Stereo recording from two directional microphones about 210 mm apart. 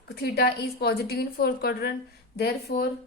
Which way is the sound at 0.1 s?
50° left (ahead or behind).